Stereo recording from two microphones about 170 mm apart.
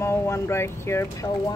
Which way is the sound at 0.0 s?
15° left (ahead or behind).